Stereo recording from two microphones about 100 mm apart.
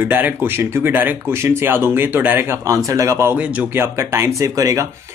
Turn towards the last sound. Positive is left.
turn(degrees=-30)  # may be behind; listen again after turning